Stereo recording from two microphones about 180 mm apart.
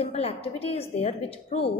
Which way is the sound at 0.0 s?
35° left (ahead or behind).